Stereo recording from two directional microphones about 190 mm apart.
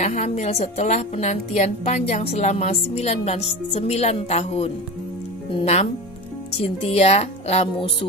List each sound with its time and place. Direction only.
0.0 s a woman's voice: 35° left (ahead or behind)